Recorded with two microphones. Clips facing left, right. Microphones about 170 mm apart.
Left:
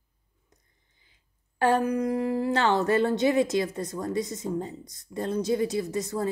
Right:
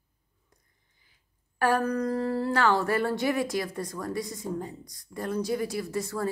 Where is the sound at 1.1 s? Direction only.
20° left (ahead or behind).